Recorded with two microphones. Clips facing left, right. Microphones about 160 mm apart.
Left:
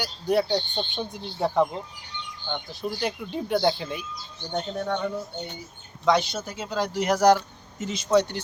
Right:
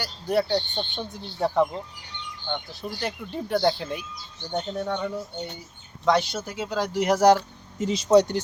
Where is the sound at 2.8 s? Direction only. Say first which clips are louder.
Left 5 dB; 5° left (ahead or behind).